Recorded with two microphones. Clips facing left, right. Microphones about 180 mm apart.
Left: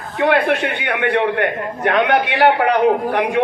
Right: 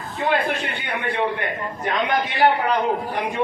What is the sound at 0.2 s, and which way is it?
A man's voice, 70° left (ahead or behind).